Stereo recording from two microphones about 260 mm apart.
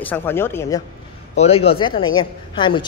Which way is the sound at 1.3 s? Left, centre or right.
Left.